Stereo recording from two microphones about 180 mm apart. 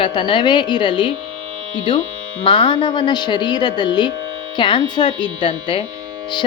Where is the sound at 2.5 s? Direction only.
25° left (ahead or behind).